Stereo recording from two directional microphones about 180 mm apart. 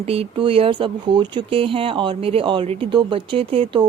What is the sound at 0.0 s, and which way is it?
A woman's voice, 35° right (ahead or behind).